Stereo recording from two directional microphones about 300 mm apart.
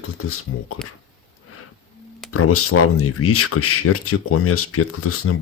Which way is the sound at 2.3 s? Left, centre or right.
Left.